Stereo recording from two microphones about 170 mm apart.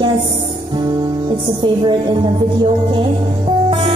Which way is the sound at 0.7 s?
25° right (ahead or behind).